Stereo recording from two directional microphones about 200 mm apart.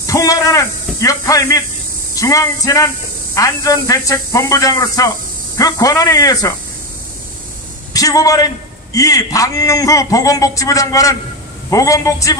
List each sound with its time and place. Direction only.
0.0 s a man's voice: 15° left (ahead or behind)
7.9 s a man's voice: 15° left (ahead or behind)